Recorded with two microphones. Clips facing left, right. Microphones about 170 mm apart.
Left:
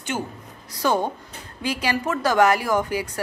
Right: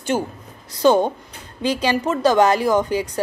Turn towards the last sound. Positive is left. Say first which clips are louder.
# right 4 dB
turn(degrees=-20)  # may be behind; listen again after turning